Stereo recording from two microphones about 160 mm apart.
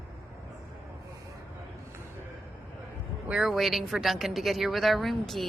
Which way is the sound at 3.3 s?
Centre (ahead or behind).